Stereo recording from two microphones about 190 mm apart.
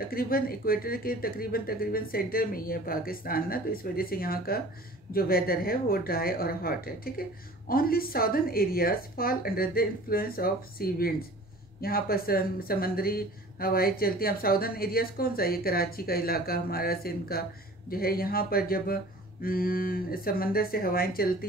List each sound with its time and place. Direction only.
0.1 s speech: 50° left (ahead or behind)